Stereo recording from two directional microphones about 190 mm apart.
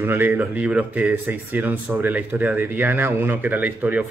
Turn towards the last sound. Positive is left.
turn(degrees=-10)  # may be behind; listen again after turning